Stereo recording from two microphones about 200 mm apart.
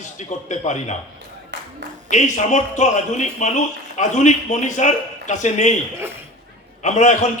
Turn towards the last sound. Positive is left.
turn(degrees=35)  # may be behind; listen again after turning